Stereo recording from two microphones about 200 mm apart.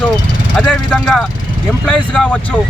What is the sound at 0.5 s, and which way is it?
Speech, 5° left (ahead or behind).